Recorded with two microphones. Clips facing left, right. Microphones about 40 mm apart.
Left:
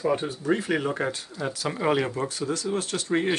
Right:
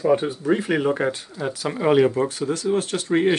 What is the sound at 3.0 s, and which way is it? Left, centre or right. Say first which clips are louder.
Speech: right 6 dB; centre.